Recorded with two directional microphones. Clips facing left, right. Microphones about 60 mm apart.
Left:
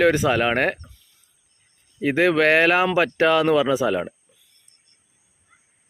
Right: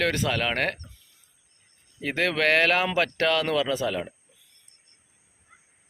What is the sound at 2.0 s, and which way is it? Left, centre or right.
Speech, centre.